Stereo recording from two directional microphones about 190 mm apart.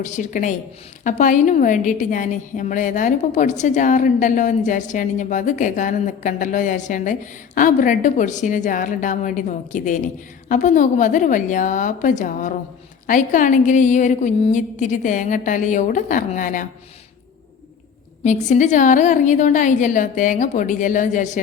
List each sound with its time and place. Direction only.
0.0 s a woman's voice: 40° left (ahead or behind)
18.2 s a woman's voice: 40° left (ahead or behind)